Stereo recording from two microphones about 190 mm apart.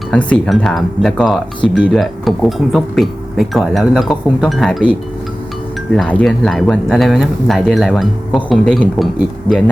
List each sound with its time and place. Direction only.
0.1 s speech: 5° left (ahead or behind)